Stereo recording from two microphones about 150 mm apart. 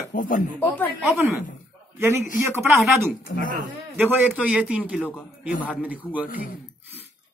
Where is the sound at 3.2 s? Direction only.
70° left (ahead or behind).